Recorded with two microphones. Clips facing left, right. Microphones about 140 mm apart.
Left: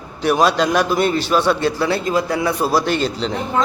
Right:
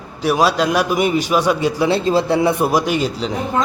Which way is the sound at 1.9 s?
30° right (ahead or behind).